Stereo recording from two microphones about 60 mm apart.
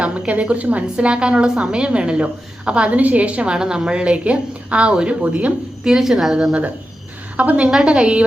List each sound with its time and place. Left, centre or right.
0.0 s a woman's voice: right
5.8 s a woman's voice: centre
7.3 s a woman's voice: right